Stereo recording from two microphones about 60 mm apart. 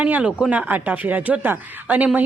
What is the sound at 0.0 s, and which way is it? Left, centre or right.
Speech, right.